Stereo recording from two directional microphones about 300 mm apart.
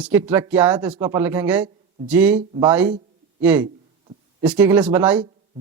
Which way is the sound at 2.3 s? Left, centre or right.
Centre.